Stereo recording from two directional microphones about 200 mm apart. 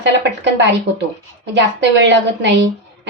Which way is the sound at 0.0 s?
60° right (ahead or behind).